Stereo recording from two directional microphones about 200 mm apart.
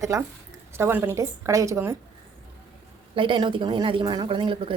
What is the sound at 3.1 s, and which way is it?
A woman's voice, 25° right (ahead or behind).